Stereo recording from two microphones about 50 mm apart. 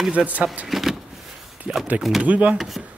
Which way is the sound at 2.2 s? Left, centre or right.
Right.